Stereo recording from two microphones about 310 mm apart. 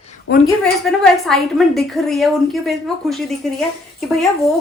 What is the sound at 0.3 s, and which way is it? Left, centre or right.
Speech, left.